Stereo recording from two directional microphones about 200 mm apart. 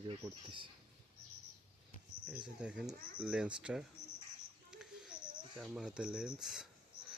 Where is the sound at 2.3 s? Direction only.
5° right (ahead or behind).